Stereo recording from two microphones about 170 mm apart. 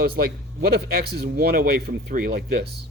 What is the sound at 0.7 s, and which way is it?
A man's voice, 65° right (ahead or behind).